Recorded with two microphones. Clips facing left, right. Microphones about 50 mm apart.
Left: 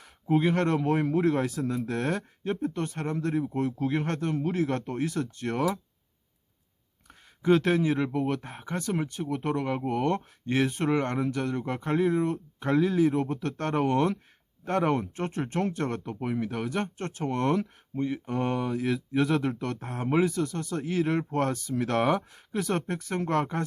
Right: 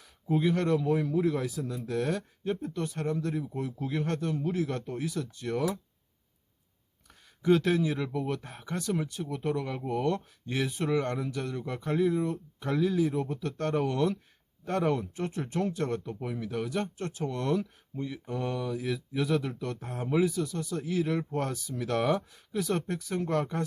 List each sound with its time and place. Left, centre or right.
0.0 s speech: left
7.1 s speech: left